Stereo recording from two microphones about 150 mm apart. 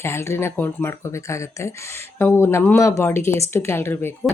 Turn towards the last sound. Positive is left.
turn(degrees=15)  # may be behind; listen again after turning